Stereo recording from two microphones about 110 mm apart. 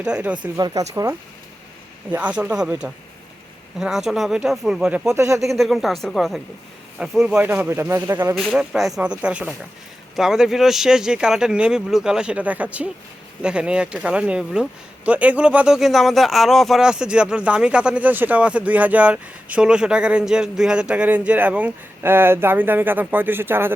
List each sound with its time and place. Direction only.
0.0 s speech: 10° right (ahead or behind)
0.5 s speech: 30° right (ahead or behind)
2.0 s speech: 10° right (ahead or behind)
5.1 s speech: 25° right (ahead or behind)
5.4 s speech: centre (ahead or behind)
7.4 s speech: 15° right (ahead or behind)
8.4 s speech: centre (ahead or behind); by 23.7 s 20° right (ahead or behind)